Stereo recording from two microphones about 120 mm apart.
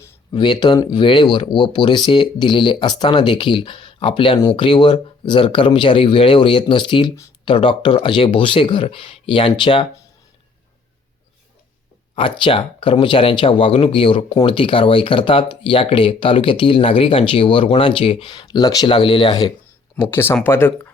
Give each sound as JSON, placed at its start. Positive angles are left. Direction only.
{"t": 0.3, "sound": "speech", "side_deg": 40}
{"t": 12.1, "sound": "speech", "side_deg": 45}
{"t": 20.0, "sound": "speech", "side_deg": 20}